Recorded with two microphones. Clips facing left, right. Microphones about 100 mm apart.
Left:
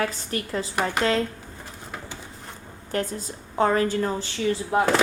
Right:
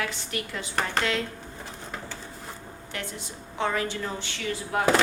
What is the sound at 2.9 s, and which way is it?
A woman's voice, 40° left (ahead or behind).